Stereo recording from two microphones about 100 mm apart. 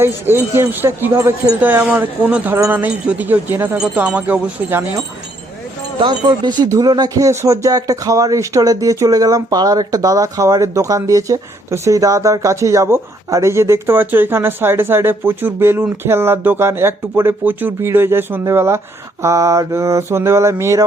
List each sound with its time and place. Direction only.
0.0 s mantra: 25° right (ahead or behind)
1.8 s speech: 15° right (ahead or behind)
3.8 s speech: 10° right (ahead or behind)
6.0 s speech: 50° right (ahead or behind); by 18.8 s 25° right (ahead or behind)
19.2 s mantra: 30° right (ahead or behind)